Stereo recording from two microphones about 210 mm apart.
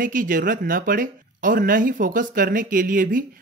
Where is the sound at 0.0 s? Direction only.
40° right (ahead or behind).